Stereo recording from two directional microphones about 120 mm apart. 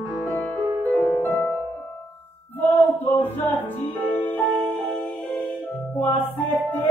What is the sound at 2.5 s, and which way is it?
Music, 15° left (ahead or behind).